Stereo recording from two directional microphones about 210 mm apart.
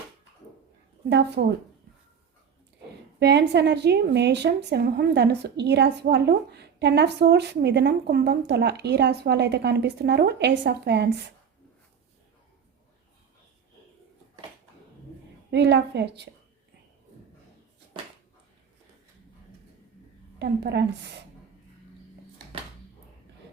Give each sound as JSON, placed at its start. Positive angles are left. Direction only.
{"t": 1.1, "sound": "a woman's voice", "side_deg": -55}
{"t": 3.2, "sound": "a woman's voice", "side_deg": -55}
{"t": 15.4, "sound": "a woman's voice", "side_deg": -55}
{"t": 20.4, "sound": "a woman's voice", "side_deg": -55}